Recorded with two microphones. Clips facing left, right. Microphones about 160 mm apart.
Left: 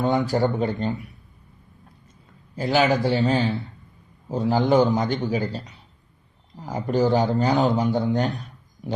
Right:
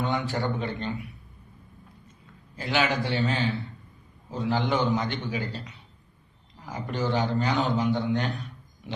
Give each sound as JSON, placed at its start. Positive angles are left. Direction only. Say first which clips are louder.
{"t": 0.0, "sound": "a man's voice", "louder": "left 7 dB", "side_deg": 40}
{"t": 2.6, "sound": "a man's voice", "louder": "left 6 dB", "side_deg": 40}